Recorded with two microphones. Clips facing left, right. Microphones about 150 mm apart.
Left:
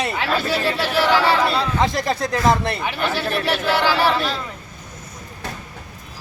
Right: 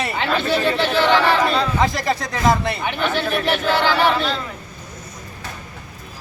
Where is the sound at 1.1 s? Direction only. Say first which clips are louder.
Even; 10° left (ahead or behind).